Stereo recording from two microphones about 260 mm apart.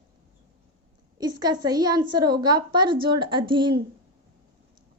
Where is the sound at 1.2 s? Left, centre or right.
Centre.